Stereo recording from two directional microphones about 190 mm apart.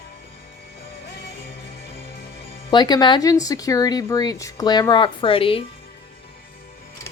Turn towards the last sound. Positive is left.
turn(degrees=30)  # may be behind; listen again after turning